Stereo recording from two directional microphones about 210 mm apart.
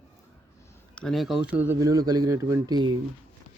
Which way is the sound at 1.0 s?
Centre (ahead or behind).